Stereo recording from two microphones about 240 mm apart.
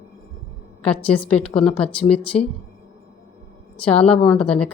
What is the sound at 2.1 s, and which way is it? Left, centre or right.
Speech, left.